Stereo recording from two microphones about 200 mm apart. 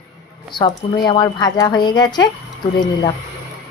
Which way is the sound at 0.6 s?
25° left (ahead or behind).